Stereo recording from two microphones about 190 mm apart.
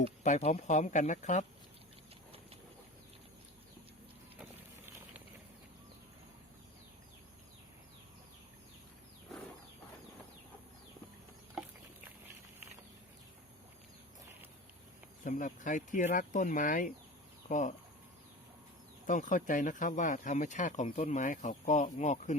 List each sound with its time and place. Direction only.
0.2 s speech: 40° left (ahead or behind)
15.2 s speech: 40° left (ahead or behind)
19.0 s speech: 40° left (ahead or behind)